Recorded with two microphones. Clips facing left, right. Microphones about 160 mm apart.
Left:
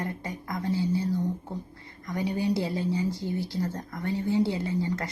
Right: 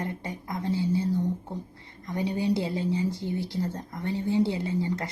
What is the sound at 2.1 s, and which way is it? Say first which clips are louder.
A woman's voice: right 1 dB; 25° right (ahead or behind).